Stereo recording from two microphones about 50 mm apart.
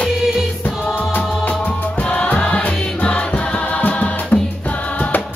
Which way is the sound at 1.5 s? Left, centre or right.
Left.